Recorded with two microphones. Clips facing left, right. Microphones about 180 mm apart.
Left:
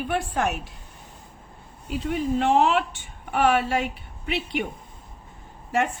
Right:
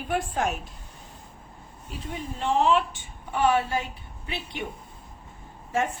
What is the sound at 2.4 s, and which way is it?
A woman's voice, 70° left (ahead or behind).